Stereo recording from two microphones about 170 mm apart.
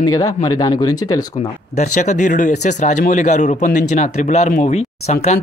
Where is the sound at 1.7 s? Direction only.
45° left (ahead or behind).